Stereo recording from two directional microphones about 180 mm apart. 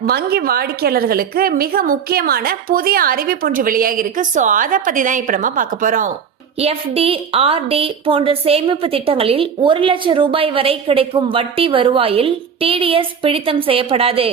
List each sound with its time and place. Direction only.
0.0 s a woman's voice: 60° right (ahead or behind)
6.6 s a woman's voice: 35° right (ahead or behind)